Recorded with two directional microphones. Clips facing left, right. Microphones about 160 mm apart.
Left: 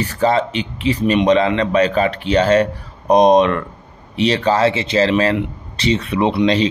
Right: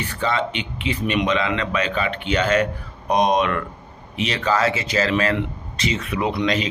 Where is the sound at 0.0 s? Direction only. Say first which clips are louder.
Left 7 dB; 35° left (ahead or behind).